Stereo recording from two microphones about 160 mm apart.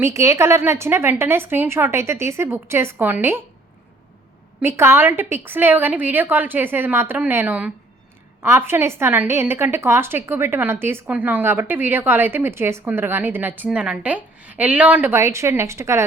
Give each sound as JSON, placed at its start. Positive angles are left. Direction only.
{"t": 0.0, "sound": "a woman's voice", "side_deg": -15}
{"t": 4.6, "sound": "a woman's voice", "side_deg": -15}